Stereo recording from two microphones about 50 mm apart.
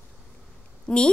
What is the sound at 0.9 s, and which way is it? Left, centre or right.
Speech, left.